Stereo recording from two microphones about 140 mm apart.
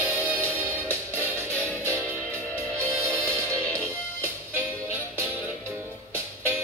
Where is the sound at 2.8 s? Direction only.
10° left (ahead or behind).